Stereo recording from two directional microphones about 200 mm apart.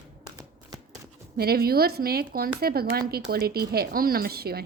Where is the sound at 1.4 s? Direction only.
50° right (ahead or behind).